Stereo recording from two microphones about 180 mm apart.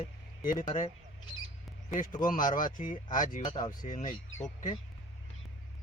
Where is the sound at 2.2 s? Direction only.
50° left (ahead or behind).